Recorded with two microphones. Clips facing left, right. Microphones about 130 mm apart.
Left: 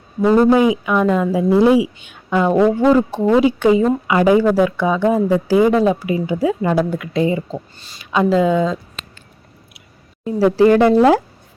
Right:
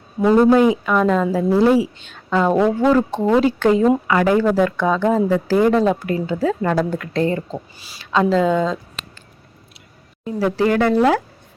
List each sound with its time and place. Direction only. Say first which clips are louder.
0.3 s speech: even; 10° left (ahead or behind)
10.2 s speech: left 6 dB; 30° left (ahead or behind)